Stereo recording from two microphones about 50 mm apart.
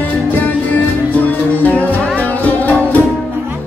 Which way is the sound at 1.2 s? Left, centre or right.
Left.